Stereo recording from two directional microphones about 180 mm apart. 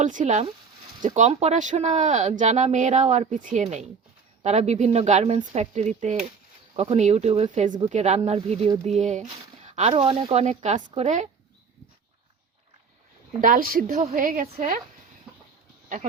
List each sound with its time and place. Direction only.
0.0 s a woman's voice: 45° right (ahead or behind)
13.4 s a woman's voice: 50° right (ahead or behind)